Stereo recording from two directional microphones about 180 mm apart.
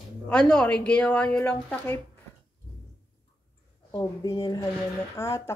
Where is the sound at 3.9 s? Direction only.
20° left (ahead or behind).